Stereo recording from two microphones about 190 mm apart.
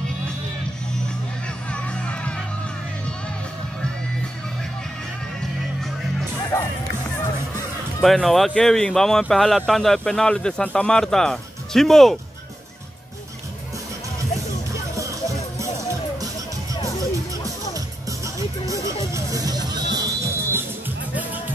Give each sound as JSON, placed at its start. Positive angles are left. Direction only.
{"t": 1.7, "sound": "music", "side_deg": 5}
{"t": 6.5, "sound": "music", "side_deg": 15}
{"t": 8.0, "sound": "speech", "side_deg": 0}
{"t": 19.1, "sound": "music", "side_deg": -20}